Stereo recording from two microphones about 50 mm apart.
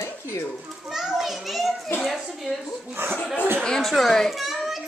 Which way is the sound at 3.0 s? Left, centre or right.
Right.